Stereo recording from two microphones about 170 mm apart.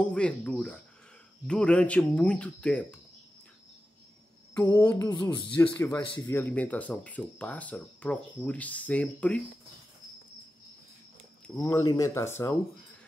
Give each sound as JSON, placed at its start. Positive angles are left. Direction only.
{"t": 0.0, "sound": "speech", "side_deg": 5}
{"t": 4.7, "sound": "speech", "side_deg": 15}
{"t": 11.5, "sound": "speech", "side_deg": 20}